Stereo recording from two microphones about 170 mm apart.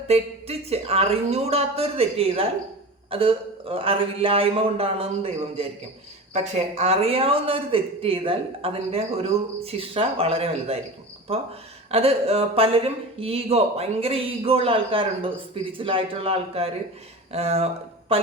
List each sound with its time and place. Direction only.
0.1 s speech: 35° right (ahead or behind)
18.1 s music: 35° right (ahead or behind)